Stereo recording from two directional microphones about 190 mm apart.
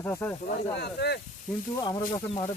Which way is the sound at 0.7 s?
60° left (ahead or behind).